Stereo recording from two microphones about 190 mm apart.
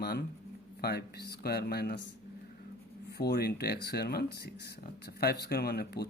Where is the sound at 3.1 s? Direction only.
60° left (ahead or behind).